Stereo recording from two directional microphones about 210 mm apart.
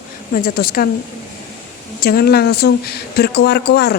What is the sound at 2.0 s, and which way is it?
A woman's voice, 45° left (ahead or behind).